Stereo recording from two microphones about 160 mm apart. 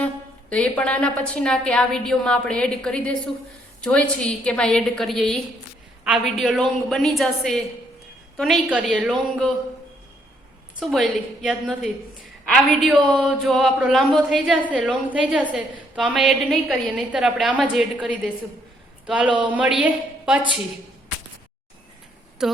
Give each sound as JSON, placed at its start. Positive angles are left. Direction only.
{"t": 0.5, "sound": "a woman's voice", "side_deg": 5}
{"t": 10.8, "sound": "a woman's voice", "side_deg": 0}
{"t": 22.4, "sound": "a woman's voice", "side_deg": -5}